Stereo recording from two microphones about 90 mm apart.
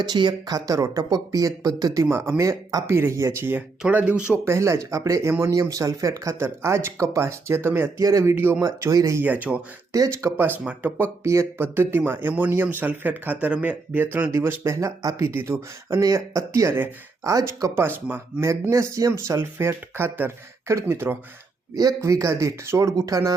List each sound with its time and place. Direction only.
0.0 s speech: 55° right (ahead or behind)
2.0 s speech: 30° right (ahead or behind)
3.8 s speech: 15° right (ahead or behind)
4.4 s speech: 30° right (ahead or behind)
8.6 s speech: 40° right (ahead or behind)
9.2 s speech: 20° right (ahead or behind)
9.9 s speech: 35° right (ahead or behind); by 14.3 s 20° right (ahead or behind)
14.3 s speech: 30° right (ahead or behind)
17.7 s speech: 25° right (ahead or behind)
18.4 s speech: 35° right (ahead or behind)
21.8 s speech: 40° right (ahead or behind)